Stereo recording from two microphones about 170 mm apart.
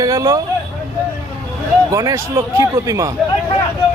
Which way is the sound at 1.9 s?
20° right (ahead or behind).